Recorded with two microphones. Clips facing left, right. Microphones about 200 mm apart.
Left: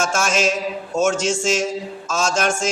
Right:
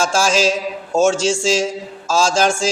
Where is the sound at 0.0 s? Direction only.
30° right (ahead or behind).